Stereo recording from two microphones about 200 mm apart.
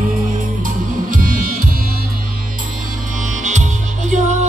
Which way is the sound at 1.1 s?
45° right (ahead or behind).